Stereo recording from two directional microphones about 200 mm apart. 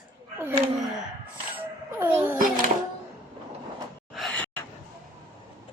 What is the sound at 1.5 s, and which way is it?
Music, 10° right (ahead or behind).